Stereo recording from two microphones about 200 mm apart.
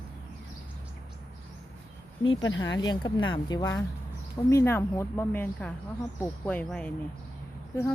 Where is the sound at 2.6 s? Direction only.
20° left (ahead or behind).